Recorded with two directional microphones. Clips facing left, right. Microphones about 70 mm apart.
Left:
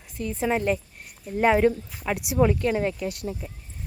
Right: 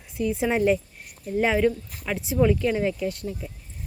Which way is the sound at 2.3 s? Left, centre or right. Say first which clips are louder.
Right 1 dB; centre.